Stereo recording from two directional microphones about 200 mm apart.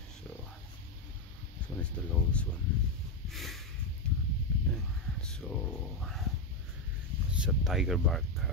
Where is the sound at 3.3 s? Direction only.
Centre (ahead or behind).